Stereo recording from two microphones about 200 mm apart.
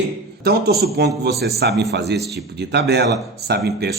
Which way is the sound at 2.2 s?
Centre (ahead or behind).